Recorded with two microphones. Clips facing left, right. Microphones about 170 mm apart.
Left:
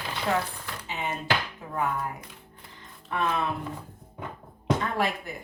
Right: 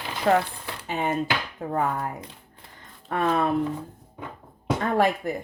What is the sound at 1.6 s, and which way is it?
Chopping, 50° right (ahead or behind).